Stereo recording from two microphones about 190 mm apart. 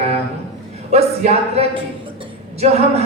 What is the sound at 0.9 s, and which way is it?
A woman's voice, 35° right (ahead or behind).